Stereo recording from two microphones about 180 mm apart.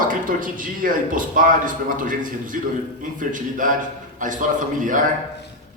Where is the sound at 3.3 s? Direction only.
45° right (ahead or behind).